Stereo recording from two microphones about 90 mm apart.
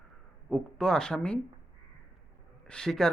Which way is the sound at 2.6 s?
10° left (ahead or behind).